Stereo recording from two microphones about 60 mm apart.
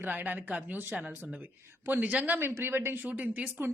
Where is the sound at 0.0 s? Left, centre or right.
Right.